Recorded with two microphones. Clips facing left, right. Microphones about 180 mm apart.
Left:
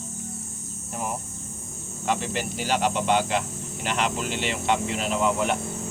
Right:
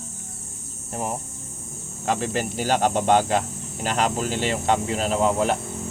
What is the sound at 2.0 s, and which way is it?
Speech, 40° right (ahead or behind).